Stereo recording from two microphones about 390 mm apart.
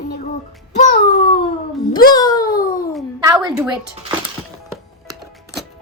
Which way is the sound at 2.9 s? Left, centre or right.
Centre.